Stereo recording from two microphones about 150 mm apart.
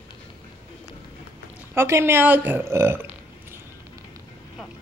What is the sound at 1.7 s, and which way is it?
A woman's voice, 15° right (ahead or behind).